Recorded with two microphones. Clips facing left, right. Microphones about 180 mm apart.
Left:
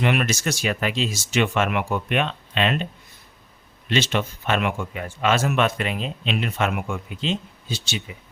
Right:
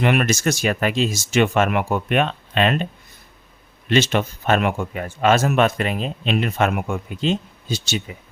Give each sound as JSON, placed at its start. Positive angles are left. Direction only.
{"t": 0.0, "sound": "speech", "side_deg": -50}
{"t": 3.8, "sound": "speech", "side_deg": -50}